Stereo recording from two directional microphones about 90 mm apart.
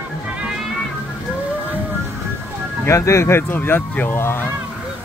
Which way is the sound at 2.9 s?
35° left (ahead or behind).